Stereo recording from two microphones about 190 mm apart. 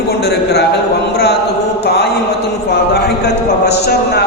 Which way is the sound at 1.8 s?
60° left (ahead or behind).